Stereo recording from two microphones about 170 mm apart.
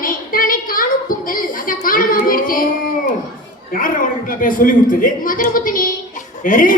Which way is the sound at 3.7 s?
55° left (ahead or behind).